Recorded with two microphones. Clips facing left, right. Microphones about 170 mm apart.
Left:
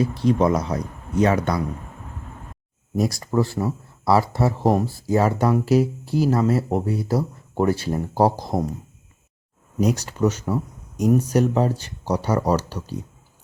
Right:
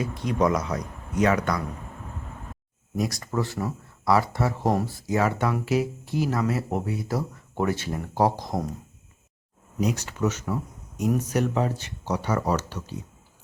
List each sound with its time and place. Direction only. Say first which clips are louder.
0.0 s speech: left 5 dB; 30° left (ahead or behind)
3.0 s speech: left 6 dB; 35° left (ahead or behind)
9.8 s speech: left 5 dB; 35° left (ahead or behind)